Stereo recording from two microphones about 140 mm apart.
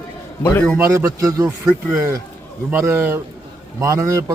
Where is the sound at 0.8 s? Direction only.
20° right (ahead or behind).